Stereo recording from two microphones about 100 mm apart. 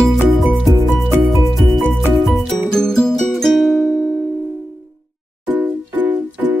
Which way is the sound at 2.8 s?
5° left (ahead or behind).